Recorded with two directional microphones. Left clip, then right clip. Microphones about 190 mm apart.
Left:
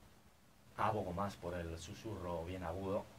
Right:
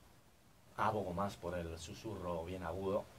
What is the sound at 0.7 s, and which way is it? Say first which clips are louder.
Speech: right 1 dB; 15° right (ahead or behind).